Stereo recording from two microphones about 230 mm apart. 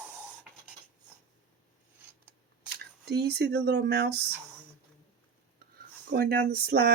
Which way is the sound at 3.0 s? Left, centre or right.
Right.